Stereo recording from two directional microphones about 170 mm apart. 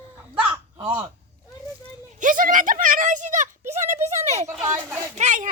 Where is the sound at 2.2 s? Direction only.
50° right (ahead or behind).